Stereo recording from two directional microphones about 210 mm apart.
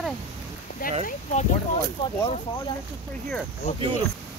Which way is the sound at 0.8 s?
40° left (ahead or behind).